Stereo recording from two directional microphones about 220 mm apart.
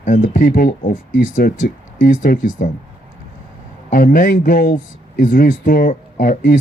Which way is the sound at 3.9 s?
35° left (ahead or behind).